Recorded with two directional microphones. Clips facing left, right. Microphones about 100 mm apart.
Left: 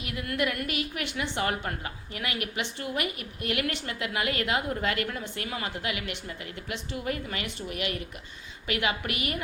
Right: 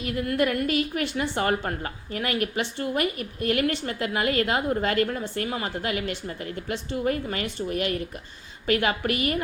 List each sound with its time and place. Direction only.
0.0 s a woman's voice: 35° right (ahead or behind)